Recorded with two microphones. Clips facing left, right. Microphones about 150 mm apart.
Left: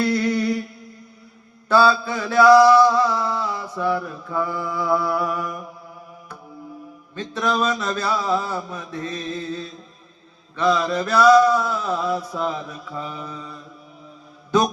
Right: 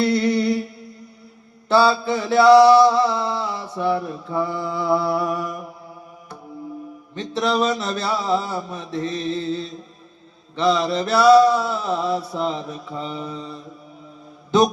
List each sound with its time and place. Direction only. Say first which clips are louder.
0.0 s humming: right 2 dB; 30° right (ahead or behind)
1.6 s mantra: even; 25° right (ahead or behind)
7.2 s mantra: right 2 dB; 30° right (ahead or behind)